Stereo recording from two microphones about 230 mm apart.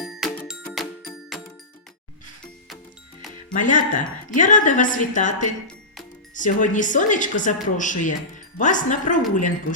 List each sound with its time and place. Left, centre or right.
0.0 s music: centre
3.5 s a woman's voice: left
6.3 s a woman's voice: left